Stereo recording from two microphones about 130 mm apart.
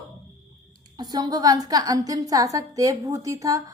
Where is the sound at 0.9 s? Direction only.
30° right (ahead or behind).